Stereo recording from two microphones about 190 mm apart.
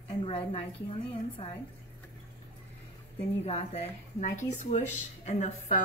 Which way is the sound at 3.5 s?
35° left (ahead or behind).